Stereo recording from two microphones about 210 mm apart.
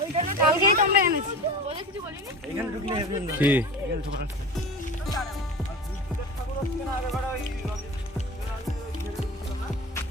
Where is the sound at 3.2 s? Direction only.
10° right (ahead or behind).